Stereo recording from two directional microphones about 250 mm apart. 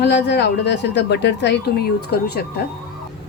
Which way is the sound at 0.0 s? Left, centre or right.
Left.